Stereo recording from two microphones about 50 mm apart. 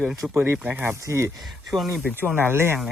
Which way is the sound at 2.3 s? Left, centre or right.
Right.